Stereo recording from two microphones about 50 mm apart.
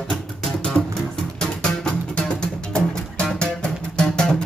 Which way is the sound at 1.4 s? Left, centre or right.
Centre.